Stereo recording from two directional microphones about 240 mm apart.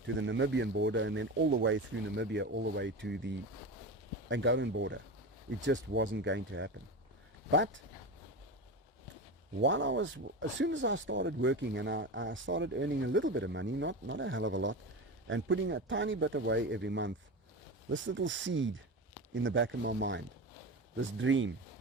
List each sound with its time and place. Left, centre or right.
0.2 s speech: right
9.6 s speech: right